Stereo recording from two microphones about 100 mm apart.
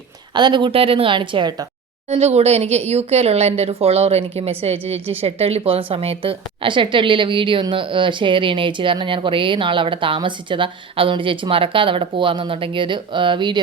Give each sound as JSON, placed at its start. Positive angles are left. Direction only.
{"t": 0.3, "sound": "a woman's voice", "side_deg": -50}
{"t": 2.1, "sound": "a woman's voice", "side_deg": -90}